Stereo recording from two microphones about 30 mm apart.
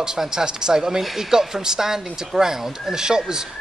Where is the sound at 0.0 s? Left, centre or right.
Right.